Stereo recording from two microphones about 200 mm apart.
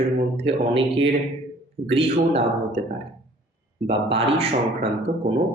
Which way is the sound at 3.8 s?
30° right (ahead or behind).